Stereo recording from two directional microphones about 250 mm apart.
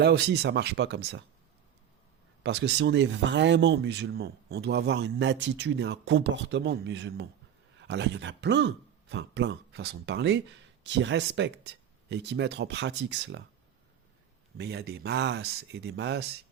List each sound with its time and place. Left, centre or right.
0.0 s speech: right
2.4 s speech: right
14.6 s speech: right